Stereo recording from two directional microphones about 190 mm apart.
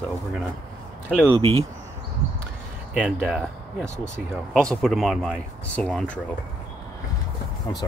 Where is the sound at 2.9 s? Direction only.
5° right (ahead or behind).